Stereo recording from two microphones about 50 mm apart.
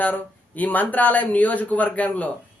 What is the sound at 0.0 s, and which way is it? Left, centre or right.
A man's voice, left.